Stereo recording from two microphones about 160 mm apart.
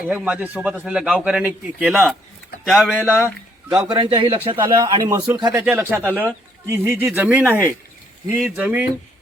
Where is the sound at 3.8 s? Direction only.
30° right (ahead or behind).